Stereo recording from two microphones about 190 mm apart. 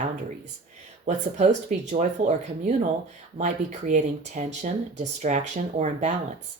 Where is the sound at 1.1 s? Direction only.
40° right (ahead or behind).